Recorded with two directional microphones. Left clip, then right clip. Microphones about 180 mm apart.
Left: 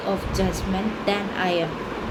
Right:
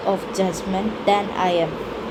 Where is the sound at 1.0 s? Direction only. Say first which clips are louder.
Right 6 dB; 10° right (ahead or behind).